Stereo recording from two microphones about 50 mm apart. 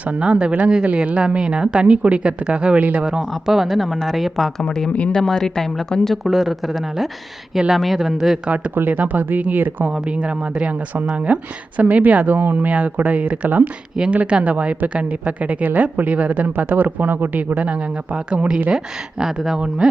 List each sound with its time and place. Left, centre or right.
0.0 s a woman's voice: right
3.0 s speech: centre
4.7 s speech: centre
8.4 s a woman's voice: right
9.9 s a woman's voice: right
13.9 s a woman's voice: centre; by 17.6 s right
17.6 s speech: right
19.2 s speech: centre
19.5 s speech: centre